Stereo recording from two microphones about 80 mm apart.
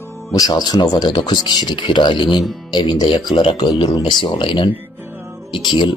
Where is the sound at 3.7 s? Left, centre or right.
Left.